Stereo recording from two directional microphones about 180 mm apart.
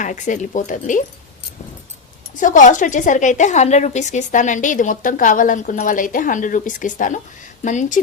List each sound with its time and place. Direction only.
0.0 s speech: 45° left (ahead or behind)
2.3 s speech: 45° left (ahead or behind)